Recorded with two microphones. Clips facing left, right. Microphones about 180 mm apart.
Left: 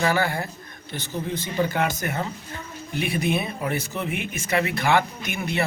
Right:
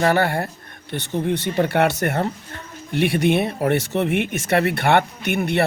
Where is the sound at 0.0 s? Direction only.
60° right (ahead or behind).